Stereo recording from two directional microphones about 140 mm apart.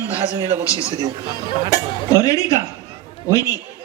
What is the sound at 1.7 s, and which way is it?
Speech, 25° left (ahead or behind).